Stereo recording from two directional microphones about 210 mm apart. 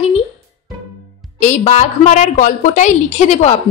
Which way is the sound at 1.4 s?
35° left (ahead or behind).